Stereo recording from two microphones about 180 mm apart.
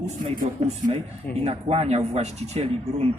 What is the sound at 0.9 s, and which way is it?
Speech, 30° right (ahead or behind).